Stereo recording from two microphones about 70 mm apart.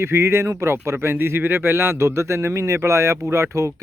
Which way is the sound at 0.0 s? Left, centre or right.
Right.